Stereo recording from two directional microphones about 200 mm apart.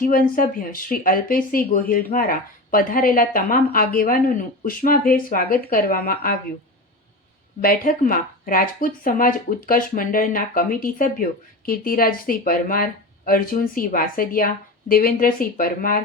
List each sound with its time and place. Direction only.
0.0 s speech: 45° left (ahead or behind)
7.6 s speech: 45° left (ahead or behind)